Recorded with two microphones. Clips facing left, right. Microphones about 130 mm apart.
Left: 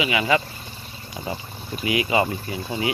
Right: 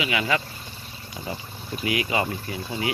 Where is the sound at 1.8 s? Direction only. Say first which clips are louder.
Left 4 dB; 15° left (ahead or behind).